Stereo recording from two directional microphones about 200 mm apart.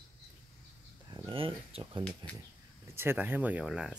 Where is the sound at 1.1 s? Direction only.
25° right (ahead or behind).